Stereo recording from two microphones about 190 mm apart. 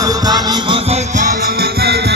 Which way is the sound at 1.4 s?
55° right (ahead or behind).